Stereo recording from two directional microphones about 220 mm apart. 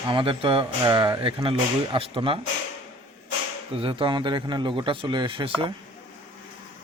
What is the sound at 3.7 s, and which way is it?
A man's voice, 25° right (ahead or behind).